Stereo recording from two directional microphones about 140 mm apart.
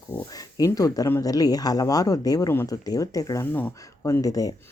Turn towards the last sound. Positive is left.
turn(degrees=25)  # may be behind; listen again after turning